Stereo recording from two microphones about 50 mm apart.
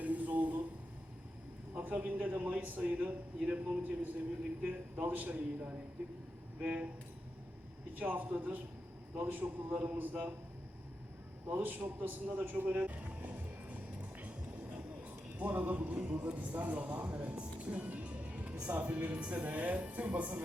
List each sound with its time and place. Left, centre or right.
0.0 s a sound: right
1.7 s a man's voice: right
7.9 s a man's voice: right
11.4 s a man's voice: right
12.7 s music: right
15.4 s a man's voice: right
15.7 s a man's voice: right